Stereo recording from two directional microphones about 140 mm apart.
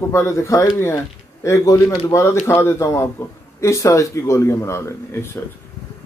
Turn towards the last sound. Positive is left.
turn(degrees=20)  # may be behind; listen again after turning